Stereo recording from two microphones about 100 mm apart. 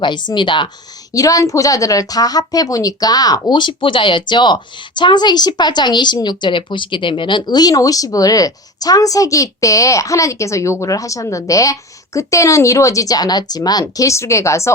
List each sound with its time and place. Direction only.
0.0 s a woman's voice: 50° left (ahead or behind)
1.1 s speech: 35° left (ahead or behind)
3.5 s a woman's voice: 50° left (ahead or behind); by 14.7 s 30° left (ahead or behind)